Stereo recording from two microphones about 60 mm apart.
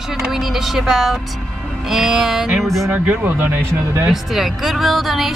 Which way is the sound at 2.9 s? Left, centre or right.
Right.